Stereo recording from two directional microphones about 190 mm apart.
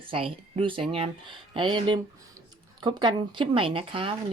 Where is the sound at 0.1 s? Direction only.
30° right (ahead or behind).